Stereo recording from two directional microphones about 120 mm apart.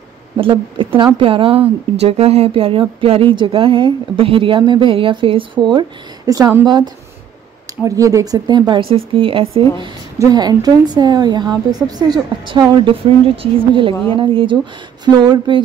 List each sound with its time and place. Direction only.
0.4 s a woman's voice: 45° right (ahead or behind)
10.1 s a woman's voice: 30° right (ahead or behind)